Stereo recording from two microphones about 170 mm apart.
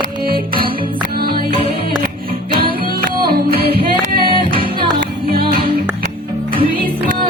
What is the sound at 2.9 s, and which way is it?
Music, 65° right (ahead or behind).